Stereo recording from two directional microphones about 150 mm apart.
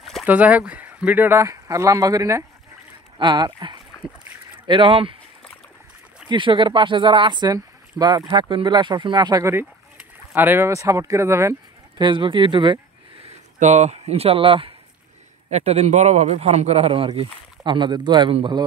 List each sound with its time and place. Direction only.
0.0 s a sound: centre (ahead or behind)
0.3 s speech: 10° right (ahead or behind); by 5.1 s 35° right (ahead or behind)
6.2 s speech: 30° right (ahead or behind)
12.0 s speech: 30° right (ahead or behind)
13.2 s speech: 50° right (ahead or behind); by 18.6 s 30° right (ahead or behind)